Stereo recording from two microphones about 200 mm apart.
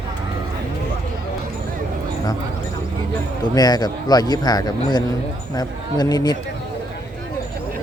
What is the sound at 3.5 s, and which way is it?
A man's voice, 20° left (ahead or behind).